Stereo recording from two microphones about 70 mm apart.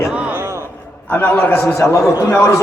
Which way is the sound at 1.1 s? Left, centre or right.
Left.